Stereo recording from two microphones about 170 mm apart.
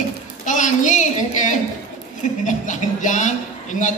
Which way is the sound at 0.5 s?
45° left (ahead or behind).